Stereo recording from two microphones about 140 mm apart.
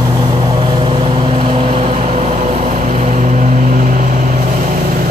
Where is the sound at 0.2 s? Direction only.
30° right (ahead or behind).